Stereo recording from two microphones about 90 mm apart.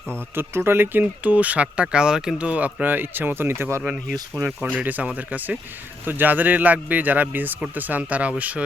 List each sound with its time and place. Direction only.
0.3 s speech: 25° right (ahead or behind)